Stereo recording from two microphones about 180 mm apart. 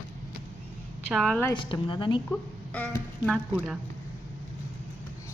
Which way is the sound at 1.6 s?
25° left (ahead or behind).